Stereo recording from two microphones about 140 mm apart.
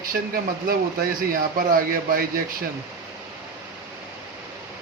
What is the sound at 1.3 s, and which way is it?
Speech, 90° right.